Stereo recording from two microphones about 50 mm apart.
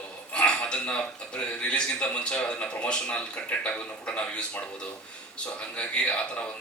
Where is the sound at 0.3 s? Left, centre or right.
Centre.